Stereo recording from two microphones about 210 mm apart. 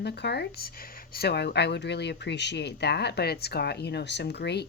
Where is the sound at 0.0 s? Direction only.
50° left (ahead or behind).